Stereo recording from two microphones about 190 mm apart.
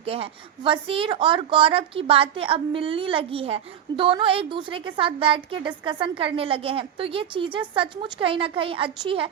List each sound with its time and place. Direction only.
0.0 s a woman's voice: 30° right (ahead or behind)